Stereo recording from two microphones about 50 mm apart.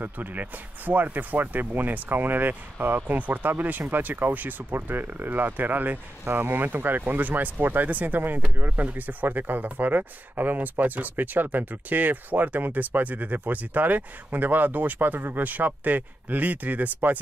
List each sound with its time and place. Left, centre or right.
0.0 s speech: right